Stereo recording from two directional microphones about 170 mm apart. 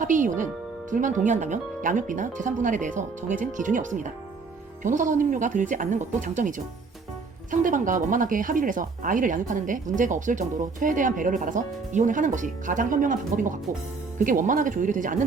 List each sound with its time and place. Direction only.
0.0 s speech: 50° right (ahead or behind)